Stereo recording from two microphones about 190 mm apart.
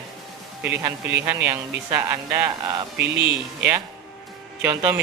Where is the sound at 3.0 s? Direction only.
65° right (ahead or behind).